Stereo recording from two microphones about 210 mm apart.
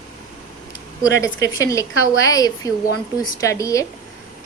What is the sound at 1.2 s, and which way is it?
A woman's voice, 15° left (ahead or behind).